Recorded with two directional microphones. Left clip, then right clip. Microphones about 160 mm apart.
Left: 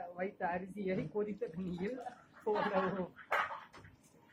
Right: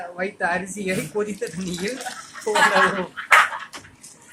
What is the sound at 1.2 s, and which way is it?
Speech, 30° right (ahead or behind).